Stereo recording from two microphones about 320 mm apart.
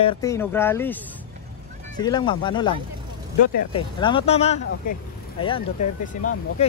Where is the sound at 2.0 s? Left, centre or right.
Centre.